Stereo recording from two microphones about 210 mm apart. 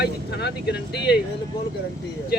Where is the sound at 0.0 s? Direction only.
50° left (ahead or behind).